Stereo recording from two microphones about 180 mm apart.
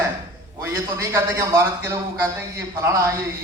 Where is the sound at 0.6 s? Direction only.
15° right (ahead or behind).